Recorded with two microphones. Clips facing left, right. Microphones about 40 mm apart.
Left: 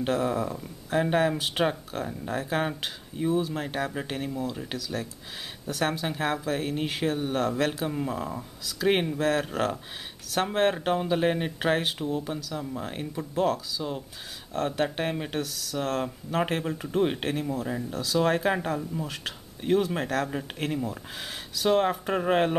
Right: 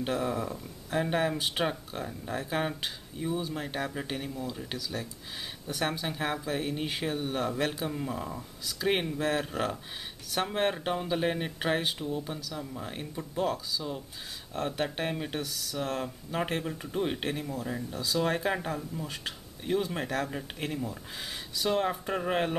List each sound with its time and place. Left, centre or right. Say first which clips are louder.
0.0 s speech: left 4 dB; centre
5.8 s speech: left 4 dB; centre